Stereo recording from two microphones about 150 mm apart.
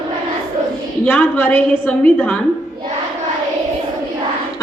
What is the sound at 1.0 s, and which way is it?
A woman's voice, 10° left (ahead or behind).